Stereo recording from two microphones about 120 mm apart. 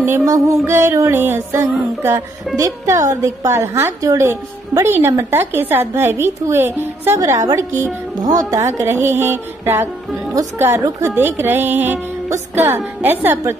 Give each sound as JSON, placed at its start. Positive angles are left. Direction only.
{"t": 0.0, "sound": "a woman's voice", "side_deg": -25}
{"t": 2.5, "sound": "a woman's voice", "side_deg": -30}